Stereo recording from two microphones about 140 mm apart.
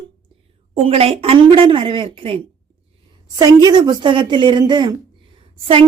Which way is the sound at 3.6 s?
30° right (ahead or behind).